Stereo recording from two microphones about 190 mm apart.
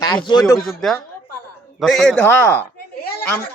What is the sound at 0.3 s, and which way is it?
Speech, 20° left (ahead or behind).